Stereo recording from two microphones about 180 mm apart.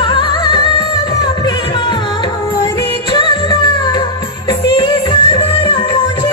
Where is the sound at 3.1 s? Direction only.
25° left (ahead or behind).